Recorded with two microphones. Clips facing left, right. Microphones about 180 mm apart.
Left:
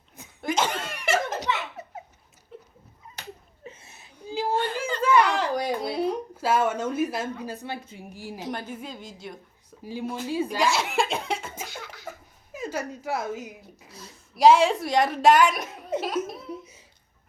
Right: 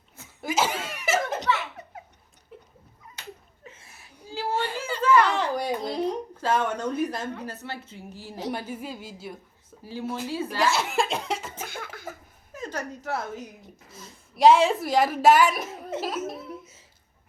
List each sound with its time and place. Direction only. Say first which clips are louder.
0.4 s cough: even; 5° right (ahead or behind)
1.8 s laughter: left 3 dB; 5° left (ahead or behind)
3.6 s chuckle: left 4 dB; 25° left (ahead or behind)
5.0 s a sound: right 1 dB; 10° left (ahead or behind)
8.4 s a woman's voice: right 3 dB; 10° right (ahead or behind)
9.8 s speech: even; 15° left (ahead or behind)
10.6 s speech: right 2 dB; centre (ahead or behind)
11.6 s a sound: right 2 dB; 55° right (ahead or behind)
12.5 s a woman's voice: left 2 dB; 10° left (ahead or behind)
16.5 s a sound: left 3 dB; 15° left (ahead or behind)